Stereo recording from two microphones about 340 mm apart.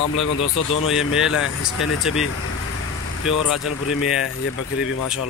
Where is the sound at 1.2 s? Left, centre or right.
Centre.